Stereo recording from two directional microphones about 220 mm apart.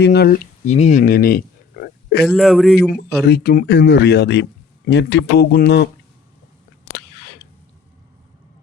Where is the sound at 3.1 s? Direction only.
45° left (ahead or behind).